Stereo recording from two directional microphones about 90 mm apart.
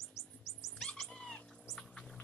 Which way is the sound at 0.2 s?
35° left (ahead or behind).